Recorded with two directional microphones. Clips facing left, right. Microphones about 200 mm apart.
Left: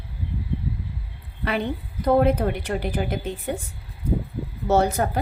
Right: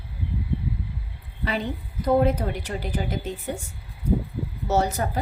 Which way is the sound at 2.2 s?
60° left (ahead or behind).